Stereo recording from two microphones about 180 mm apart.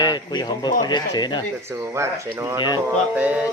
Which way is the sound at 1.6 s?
15° right (ahead or behind).